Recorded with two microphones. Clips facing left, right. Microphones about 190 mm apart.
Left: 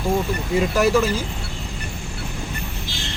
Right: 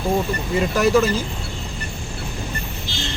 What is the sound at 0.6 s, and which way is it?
Speech, 5° left (ahead or behind).